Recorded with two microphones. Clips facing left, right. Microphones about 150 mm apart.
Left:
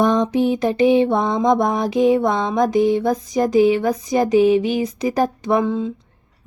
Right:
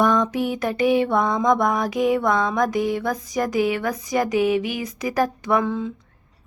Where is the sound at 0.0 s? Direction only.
25° left (ahead or behind).